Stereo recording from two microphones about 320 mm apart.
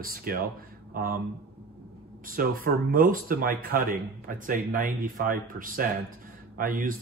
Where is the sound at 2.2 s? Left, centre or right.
Right.